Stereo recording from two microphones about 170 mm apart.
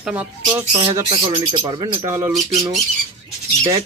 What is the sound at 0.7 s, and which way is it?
Speech, 30° right (ahead or behind).